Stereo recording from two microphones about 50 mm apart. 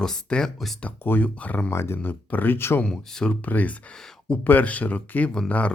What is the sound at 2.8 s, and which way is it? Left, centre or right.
Speech, centre.